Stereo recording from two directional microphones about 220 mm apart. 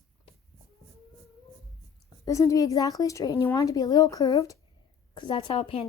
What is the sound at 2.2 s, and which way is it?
A woman's voice, 15° left (ahead or behind).